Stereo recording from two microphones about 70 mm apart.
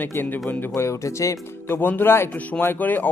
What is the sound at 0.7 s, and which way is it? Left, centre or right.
Speech, left.